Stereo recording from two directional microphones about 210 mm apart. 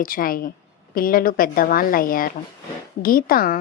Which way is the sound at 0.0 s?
40° left (ahead or behind).